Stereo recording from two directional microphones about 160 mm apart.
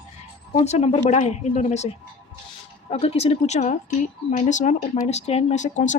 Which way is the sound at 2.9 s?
40° left (ahead or behind).